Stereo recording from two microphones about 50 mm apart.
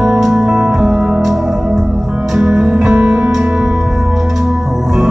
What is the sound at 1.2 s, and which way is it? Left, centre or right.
Music, centre.